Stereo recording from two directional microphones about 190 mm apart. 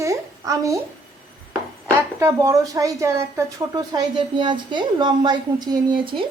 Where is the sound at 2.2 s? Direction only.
15° right (ahead or behind).